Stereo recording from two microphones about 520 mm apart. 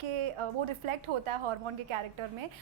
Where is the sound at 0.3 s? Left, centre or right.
Right.